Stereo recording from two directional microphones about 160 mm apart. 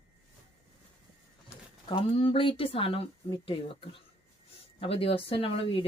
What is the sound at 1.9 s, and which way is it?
Speech, 35° left (ahead or behind).